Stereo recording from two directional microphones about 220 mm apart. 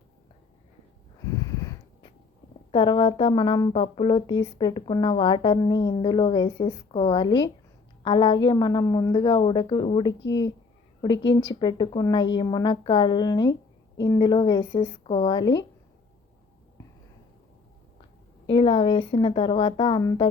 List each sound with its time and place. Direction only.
1.4 s a sound: 20° left (ahead or behind)
2.7 s speech: 20° left (ahead or behind)
11.6 s speech: 20° left (ahead or behind)
18.4 s speech: 25° left (ahead or behind)